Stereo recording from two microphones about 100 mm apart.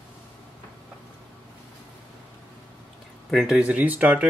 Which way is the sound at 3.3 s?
5° right (ahead or behind).